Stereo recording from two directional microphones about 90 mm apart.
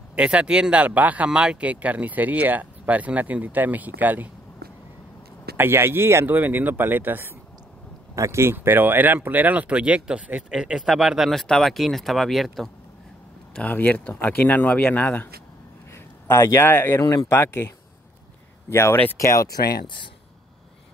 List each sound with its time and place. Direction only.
0.1 s speech: 15° right (ahead or behind)
5.6 s speech: 25° right (ahead or behind); by 12.6 s centre (ahead or behind)
13.6 s speech: 20° left (ahead or behind)
15.9 s a sound: 30° left (ahead or behind)
16.6 s speech: 25° left (ahead or behind)
17.0 s speech: 40° left (ahead or behind)
17.3 s speech: 25° left (ahead or behind)